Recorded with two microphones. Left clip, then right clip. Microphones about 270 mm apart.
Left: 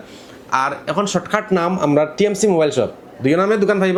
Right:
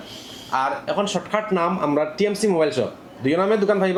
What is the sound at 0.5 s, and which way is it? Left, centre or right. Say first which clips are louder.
A man's voice: left 3 dB; left.